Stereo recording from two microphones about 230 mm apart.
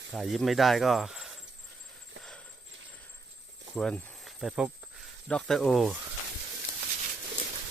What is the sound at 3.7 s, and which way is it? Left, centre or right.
Speech, centre.